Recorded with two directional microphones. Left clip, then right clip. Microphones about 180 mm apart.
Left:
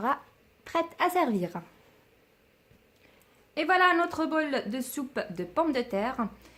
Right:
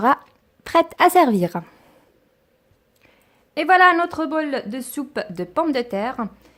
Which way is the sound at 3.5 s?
45° right (ahead or behind).